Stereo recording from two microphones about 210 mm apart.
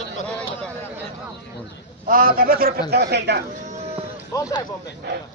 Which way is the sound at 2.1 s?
45° right (ahead or behind).